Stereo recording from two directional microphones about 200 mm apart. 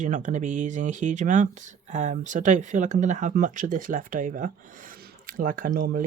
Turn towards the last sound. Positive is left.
turn(degrees=-45)  # may be behind; listen again after turning